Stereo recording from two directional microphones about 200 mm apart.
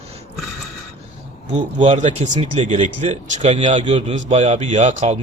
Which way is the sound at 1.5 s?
35° right (ahead or behind).